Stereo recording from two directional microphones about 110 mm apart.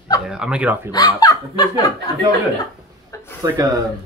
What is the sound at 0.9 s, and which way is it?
Speech, 35° left (ahead or behind).